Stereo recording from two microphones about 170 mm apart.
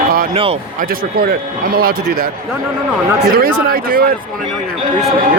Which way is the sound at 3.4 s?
60° right (ahead or behind).